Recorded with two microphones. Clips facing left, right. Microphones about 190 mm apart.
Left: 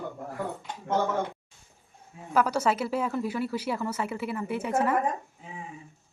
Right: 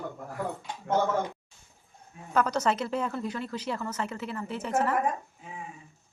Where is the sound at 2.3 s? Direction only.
10° left (ahead or behind).